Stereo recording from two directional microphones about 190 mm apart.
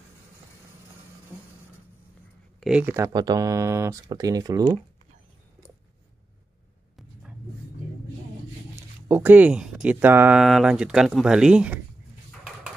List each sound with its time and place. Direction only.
2.6 s speech: 5° right (ahead or behind)
3.1 s speech: 20° right (ahead or behind)
9.0 s speech: 10° right (ahead or behind)